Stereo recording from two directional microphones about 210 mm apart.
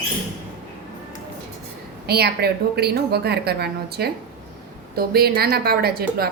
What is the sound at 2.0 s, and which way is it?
A woman's voice, 50° right (ahead or behind).